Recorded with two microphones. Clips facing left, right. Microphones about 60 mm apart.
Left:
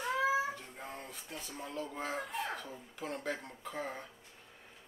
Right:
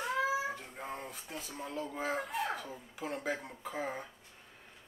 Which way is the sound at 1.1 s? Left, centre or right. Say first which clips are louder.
Right 1 dB; centre.